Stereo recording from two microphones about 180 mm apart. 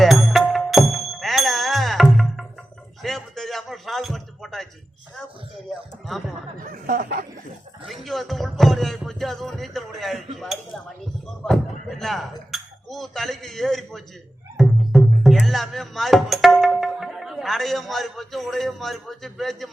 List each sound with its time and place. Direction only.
0.0 s music: centre (ahead or behind)
3.0 s a sound: centre (ahead or behind)
6.1 s snicker: centre (ahead or behind)
6.6 s snicker: 50° right (ahead or behind)
7.9 s music: centre (ahead or behind)
11.9 s a sound: centre (ahead or behind)
14.5 s music: centre (ahead or behind)